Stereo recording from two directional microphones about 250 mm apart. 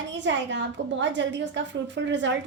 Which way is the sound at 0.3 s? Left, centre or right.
Right.